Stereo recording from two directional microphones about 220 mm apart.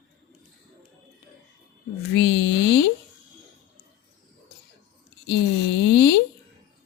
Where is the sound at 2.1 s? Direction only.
50° left (ahead or behind).